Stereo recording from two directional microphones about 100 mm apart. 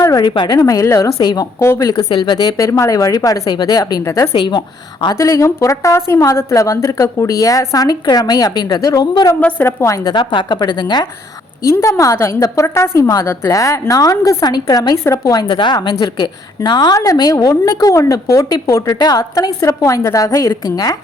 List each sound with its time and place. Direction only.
0.0 s a sound: 35° left (ahead or behind)
0.3 s a woman's voice: 50° left (ahead or behind)
0.6 s a woman's voice: 30° left (ahead or behind)
1.2 s a woman's voice: 45° left (ahead or behind)
1.5 s speech: 25° left (ahead or behind)
1.9 s a woman's voice: 40° left (ahead or behind)
4.4 s a woman's voice: 50° left (ahead or behind)
5.1 s a woman's voice: 30° left (ahead or behind)
9.4 s speech: 20° left (ahead or behind)
9.8 s a woman's voice: 35° left (ahead or behind)
11.6 s a woman's voice: 30° left (ahead or behind)
15.4 s a woman's voice: 55° left (ahead or behind)
17.1 s a woman's voice: 35° left (ahead or behind)